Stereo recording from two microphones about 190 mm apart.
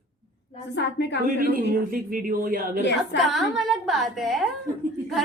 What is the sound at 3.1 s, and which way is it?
A woman's voice, centre (ahead or behind).